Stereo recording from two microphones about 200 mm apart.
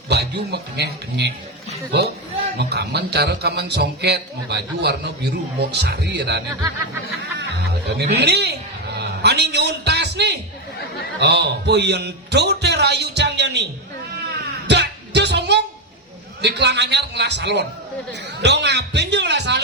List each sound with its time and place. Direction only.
0.1 s a man's voice: 55° right (ahead or behind)
8.1 s a man's voice: 55° right (ahead or behind)
9.0 s music: 55° right (ahead or behind)
11.2 s a man's voice: 55° right (ahead or behind)
14.7 s music: 60° right (ahead or behind)
16.4 s a man's voice: 60° right (ahead or behind)